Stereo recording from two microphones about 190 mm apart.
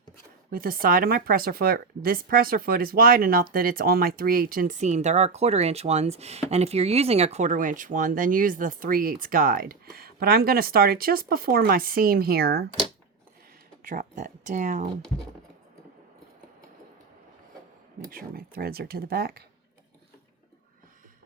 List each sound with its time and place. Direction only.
0.5 s speech: 50° right (ahead or behind)
13.8 s speech: 45° right (ahead or behind)
18.1 s speech: 50° right (ahead or behind)